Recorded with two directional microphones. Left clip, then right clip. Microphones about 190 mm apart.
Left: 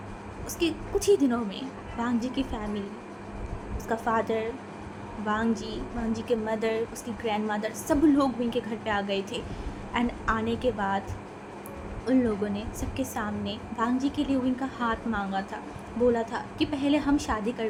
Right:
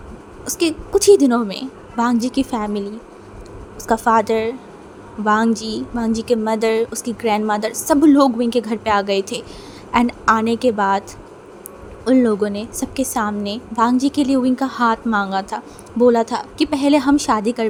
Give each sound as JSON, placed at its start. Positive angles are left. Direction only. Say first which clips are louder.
{"t": 0.4, "sound": "a woman's voice", "louder": "right 9 dB", "side_deg": -50}
{"t": 3.8, "sound": "a woman's voice", "louder": "right 12 dB", "side_deg": -50}
{"t": 12.0, "sound": "a woman's voice", "louder": "right 11 dB", "side_deg": -50}